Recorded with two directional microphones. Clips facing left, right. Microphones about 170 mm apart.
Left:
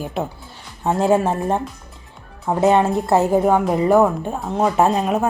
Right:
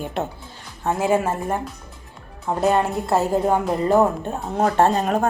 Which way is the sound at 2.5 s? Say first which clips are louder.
Left 3 dB; centre (ahead or behind).